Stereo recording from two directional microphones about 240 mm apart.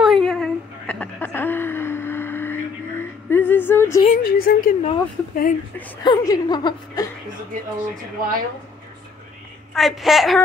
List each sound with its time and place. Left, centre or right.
0.0 s a sound: centre
4.1 s a woman's voice: left
6.0 s a woman's voice: centre
7.5 s speech: right
9.8 s a woman's voice: centre